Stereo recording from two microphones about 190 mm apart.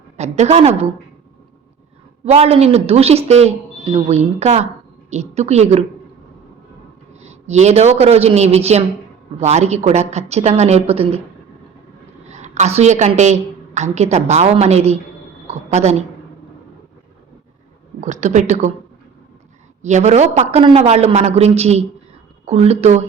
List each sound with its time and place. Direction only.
0.2 s a woman's voice: 35° right (ahead or behind)
2.2 s a woman's voice: 35° right (ahead or behind)
7.2 s a woman's voice: 35° right (ahead or behind)
12.3 s a woman's voice: 35° right (ahead or behind)
18.0 s a woman's voice: 40° right (ahead or behind)
19.8 s a woman's voice: 40° right (ahead or behind)